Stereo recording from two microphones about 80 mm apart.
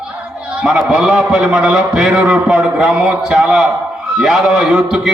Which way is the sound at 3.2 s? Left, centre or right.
Centre.